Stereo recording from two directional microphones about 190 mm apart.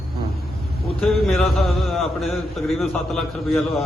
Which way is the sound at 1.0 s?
Centre (ahead or behind).